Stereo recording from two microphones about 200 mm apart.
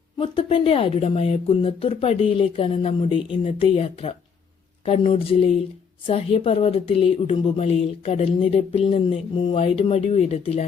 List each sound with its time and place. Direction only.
0.2 s a woman's voice: 25° left (ahead or behind)